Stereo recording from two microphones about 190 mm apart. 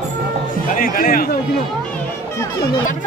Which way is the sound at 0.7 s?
45° left (ahead or behind).